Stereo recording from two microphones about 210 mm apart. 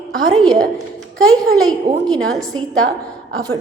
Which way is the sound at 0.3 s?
Centre (ahead or behind).